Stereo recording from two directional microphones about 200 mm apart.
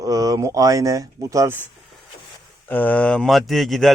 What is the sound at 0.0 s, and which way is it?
Speech, 15° right (ahead or behind).